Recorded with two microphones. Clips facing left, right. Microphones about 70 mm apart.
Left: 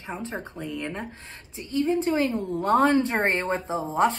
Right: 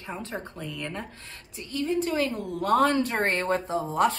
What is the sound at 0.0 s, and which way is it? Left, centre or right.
A woman's voice, left.